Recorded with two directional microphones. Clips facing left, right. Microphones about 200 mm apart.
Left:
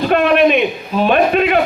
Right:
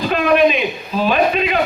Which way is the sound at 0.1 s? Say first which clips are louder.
Left 2 dB; 60° left (ahead or behind).